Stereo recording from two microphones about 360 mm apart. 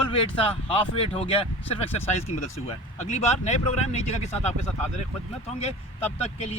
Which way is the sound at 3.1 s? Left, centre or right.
Centre.